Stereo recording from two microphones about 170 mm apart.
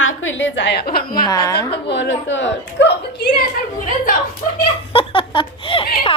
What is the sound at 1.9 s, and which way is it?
A woman's voice, 90° left.